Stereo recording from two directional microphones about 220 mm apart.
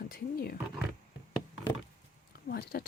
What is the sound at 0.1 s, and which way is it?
Roaring cats, 45° left (ahead or behind).